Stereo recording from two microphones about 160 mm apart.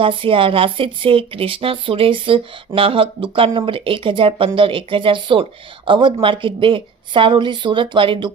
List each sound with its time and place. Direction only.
0.0 s speech: 35° right (ahead or behind)